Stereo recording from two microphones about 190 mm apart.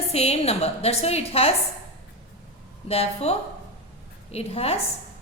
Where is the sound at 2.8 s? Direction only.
30° left (ahead or behind).